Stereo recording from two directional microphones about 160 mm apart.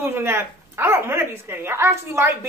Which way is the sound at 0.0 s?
15° right (ahead or behind).